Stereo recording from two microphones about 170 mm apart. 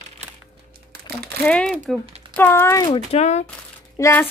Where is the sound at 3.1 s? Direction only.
40° left (ahead or behind).